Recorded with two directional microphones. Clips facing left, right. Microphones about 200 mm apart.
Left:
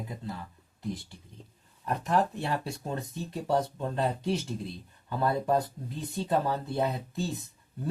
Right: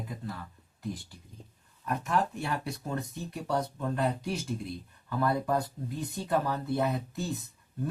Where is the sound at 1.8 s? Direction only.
30° left (ahead or behind).